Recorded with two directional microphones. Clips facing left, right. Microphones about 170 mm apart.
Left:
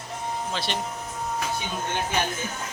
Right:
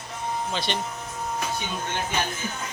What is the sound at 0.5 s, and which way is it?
Speech, centre (ahead or behind).